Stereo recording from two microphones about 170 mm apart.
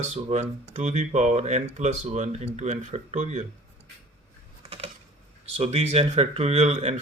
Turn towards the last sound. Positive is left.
turn(degrees=-40)  # may be behind; listen again after turning